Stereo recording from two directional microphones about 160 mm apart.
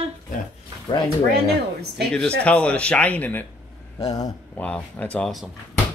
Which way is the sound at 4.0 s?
25° left (ahead or behind).